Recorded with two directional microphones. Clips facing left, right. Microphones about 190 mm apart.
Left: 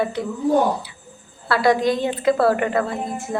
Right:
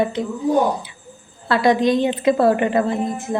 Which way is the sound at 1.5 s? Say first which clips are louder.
Right 2 dB; 20° right (ahead or behind).